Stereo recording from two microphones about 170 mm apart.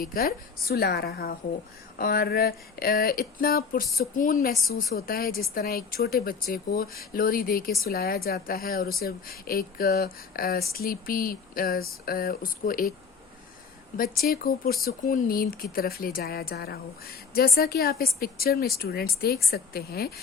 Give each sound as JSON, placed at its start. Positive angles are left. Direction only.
{"t": 0.0, "sound": "a woman's voice", "side_deg": 60}
{"t": 4.6, "sound": "a woman's voice", "side_deg": 65}
{"t": 13.9, "sound": "a woman's voice", "side_deg": 60}